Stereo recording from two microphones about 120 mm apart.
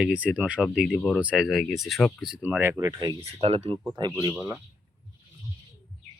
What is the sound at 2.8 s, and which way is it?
Speech, 30° right (ahead or behind).